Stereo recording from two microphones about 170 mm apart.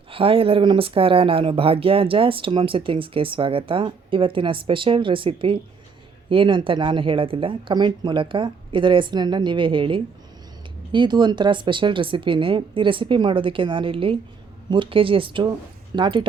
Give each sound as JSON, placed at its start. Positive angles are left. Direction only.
{"t": 0.1, "sound": "speech", "side_deg": -35}